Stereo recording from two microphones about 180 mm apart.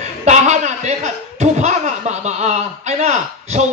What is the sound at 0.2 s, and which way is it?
A man's voice, 40° right (ahead or behind).